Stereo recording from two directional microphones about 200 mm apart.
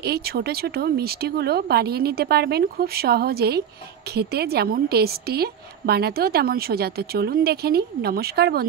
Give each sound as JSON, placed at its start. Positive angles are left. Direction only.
{"t": 0.0, "sound": "a woman's voice", "side_deg": -50}